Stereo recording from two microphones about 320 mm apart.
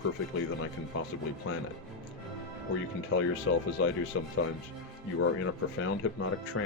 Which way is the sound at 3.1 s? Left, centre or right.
Left.